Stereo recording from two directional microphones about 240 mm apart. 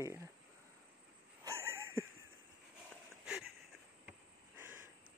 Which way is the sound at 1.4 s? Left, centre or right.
Centre.